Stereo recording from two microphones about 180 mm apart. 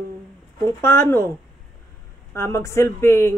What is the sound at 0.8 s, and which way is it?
Speech, 15° left (ahead or behind).